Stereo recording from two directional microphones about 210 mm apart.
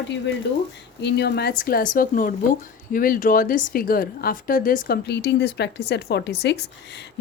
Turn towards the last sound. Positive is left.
turn(degrees=55)  # may be behind; listen again after turning